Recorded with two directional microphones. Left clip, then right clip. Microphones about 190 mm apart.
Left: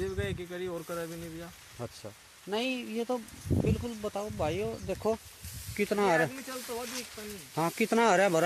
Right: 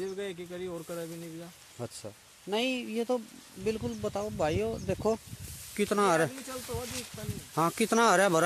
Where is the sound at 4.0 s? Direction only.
30° right (ahead or behind).